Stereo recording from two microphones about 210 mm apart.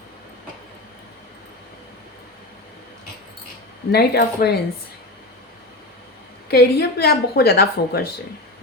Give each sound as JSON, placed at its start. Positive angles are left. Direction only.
{"t": 3.9, "sound": "a woman's voice", "side_deg": 50}
{"t": 6.5, "sound": "a woman's voice", "side_deg": 50}